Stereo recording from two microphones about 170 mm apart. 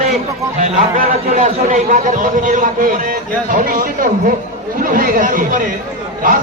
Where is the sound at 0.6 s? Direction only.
50° right (ahead or behind).